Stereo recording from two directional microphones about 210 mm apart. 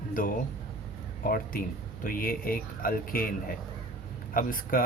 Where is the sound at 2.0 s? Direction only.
45° left (ahead or behind).